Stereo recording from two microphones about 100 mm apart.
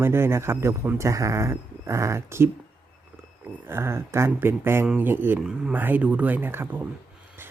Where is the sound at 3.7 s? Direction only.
25° right (ahead or behind).